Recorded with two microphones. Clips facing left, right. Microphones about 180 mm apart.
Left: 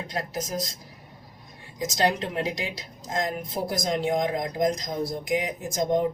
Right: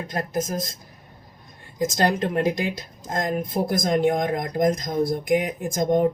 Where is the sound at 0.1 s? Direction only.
50° right (ahead or behind).